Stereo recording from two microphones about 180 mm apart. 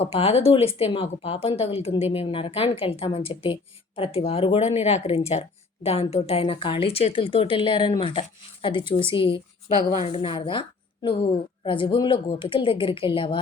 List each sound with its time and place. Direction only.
0.0 s a woman's voice: 35° left (ahead or behind)